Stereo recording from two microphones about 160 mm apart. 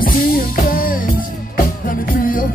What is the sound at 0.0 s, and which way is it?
Music, 60° left (ahead or behind).